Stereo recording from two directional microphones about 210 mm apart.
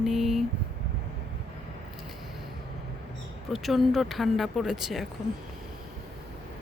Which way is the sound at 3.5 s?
Centre (ahead or behind).